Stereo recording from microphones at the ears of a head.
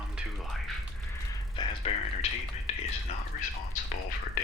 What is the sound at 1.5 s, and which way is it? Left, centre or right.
Speech, left.